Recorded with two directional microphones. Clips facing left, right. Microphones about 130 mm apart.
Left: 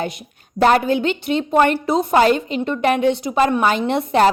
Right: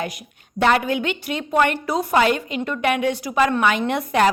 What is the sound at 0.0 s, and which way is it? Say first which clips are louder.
A woman's voice: left 3 dB; 30° left (ahead or behind).